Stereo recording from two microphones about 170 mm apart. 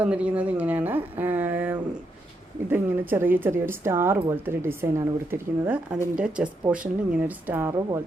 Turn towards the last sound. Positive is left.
turn(degrees=-15)  # may be behind; listen again after turning